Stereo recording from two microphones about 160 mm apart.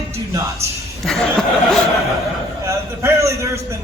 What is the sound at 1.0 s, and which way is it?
Speech, centre (ahead or behind).